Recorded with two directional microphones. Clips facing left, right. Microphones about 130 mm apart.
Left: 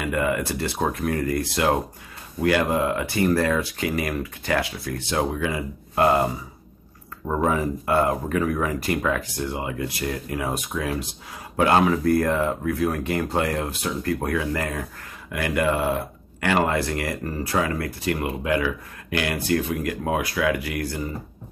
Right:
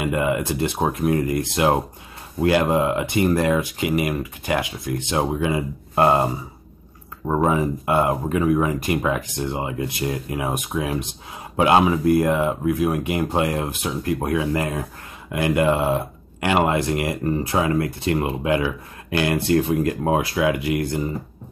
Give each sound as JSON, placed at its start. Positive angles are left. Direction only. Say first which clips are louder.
{"t": 0.0, "sound": "speech", "louder": "right 2 dB", "side_deg": -20}
{"t": 7.2, "sound": "speech", "louder": "right 3 dB", "side_deg": -20}